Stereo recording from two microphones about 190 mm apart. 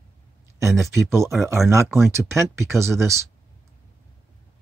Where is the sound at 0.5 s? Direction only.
15° right (ahead or behind).